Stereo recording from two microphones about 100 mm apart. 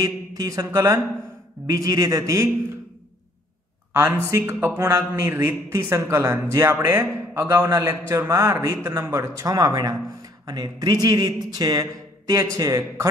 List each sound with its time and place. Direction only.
0.0 s speech: 35° right (ahead or behind)
3.9 s speech: 25° right (ahead or behind)